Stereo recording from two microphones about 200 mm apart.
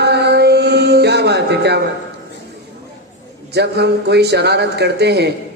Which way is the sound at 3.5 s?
55° right (ahead or behind).